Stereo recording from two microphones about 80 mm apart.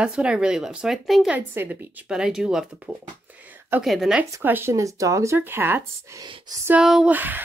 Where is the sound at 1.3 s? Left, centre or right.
Right.